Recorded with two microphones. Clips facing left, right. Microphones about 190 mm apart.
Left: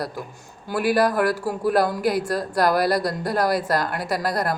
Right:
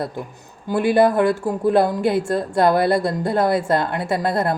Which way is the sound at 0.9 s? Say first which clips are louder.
Right 6 dB; 25° right (ahead or behind).